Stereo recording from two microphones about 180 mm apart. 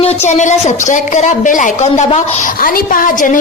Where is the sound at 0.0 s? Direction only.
35° left (ahead or behind).